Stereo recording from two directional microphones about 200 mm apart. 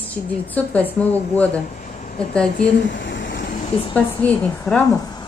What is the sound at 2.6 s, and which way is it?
Speech, 60° left (ahead or behind).